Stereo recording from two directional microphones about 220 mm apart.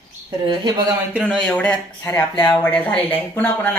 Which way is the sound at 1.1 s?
Centre (ahead or behind).